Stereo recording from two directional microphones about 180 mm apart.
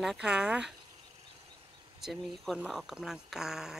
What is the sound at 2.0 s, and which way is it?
Speech, centre (ahead or behind).